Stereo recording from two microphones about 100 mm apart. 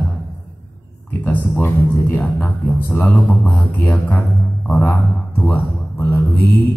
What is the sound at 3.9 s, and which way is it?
Speech, 25° left (ahead or behind).